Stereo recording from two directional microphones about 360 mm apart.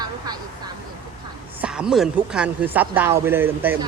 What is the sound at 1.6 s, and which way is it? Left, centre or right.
A woman's voice, centre.